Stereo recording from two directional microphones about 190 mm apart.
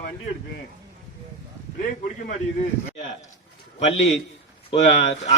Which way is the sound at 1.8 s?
45° left (ahead or behind).